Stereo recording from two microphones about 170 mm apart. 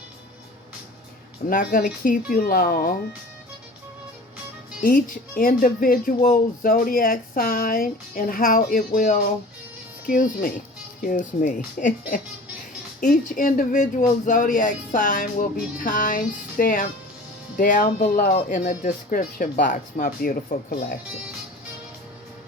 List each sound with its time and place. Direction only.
1.5 s speech: 55° left (ahead or behind)
4.8 s speech: 50° left (ahead or behind)
18.4 s speech: 50° left (ahead or behind)